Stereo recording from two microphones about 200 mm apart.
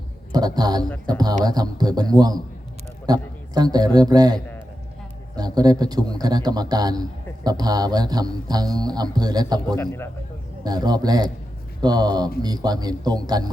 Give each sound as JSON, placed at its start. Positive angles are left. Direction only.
{"t": 0.3, "sound": "speech", "side_deg": -20}
{"t": 5.4, "sound": "speech", "side_deg": -20}
{"t": 9.7, "sound": "speech", "side_deg": 15}
{"t": 10.6, "sound": "speech", "side_deg": -20}